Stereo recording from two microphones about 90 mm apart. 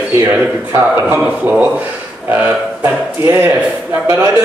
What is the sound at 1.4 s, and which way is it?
A man's voice, 15° right (ahead or behind).